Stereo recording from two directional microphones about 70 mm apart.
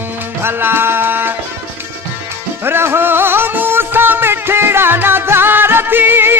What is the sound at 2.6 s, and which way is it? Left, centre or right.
Music, right.